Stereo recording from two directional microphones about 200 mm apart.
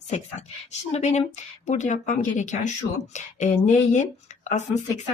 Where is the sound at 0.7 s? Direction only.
35° left (ahead or behind).